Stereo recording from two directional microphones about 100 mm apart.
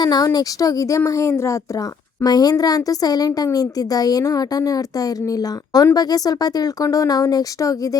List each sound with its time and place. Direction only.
0.0 s speech: 40° left (ahead or behind)